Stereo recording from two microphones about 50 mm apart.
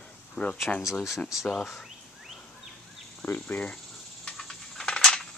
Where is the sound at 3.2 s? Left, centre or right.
Left.